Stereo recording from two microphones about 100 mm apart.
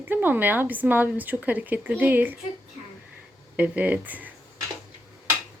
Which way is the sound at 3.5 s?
15° right (ahead or behind).